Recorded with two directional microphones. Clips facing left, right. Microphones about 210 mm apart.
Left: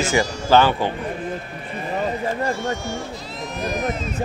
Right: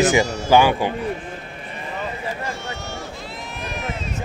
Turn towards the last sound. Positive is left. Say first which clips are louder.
# left 6 dB
turn(degrees=40)  # may be behind; listen again after turning